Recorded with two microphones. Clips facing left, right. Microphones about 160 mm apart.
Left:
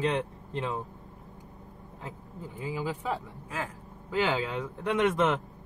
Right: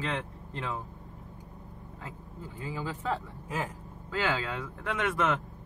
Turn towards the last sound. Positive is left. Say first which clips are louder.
# left 4 dB
turn(degrees=20)  # may be behind; listen again after turning